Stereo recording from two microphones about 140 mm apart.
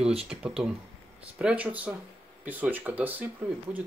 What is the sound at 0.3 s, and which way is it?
Speech, 5° right (ahead or behind).